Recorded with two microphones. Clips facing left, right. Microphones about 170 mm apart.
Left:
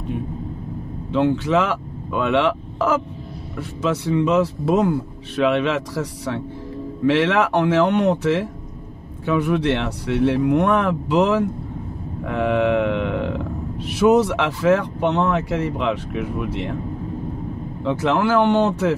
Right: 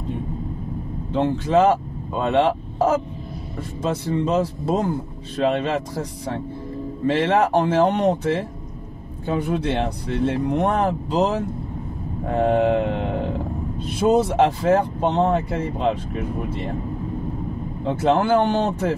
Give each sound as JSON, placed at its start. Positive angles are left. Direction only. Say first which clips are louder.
{"t": 1.1, "sound": "a man's voice", "louder": "left 1 dB", "side_deg": 70}
{"t": 17.8, "sound": "a man's voice", "louder": "even", "side_deg": 70}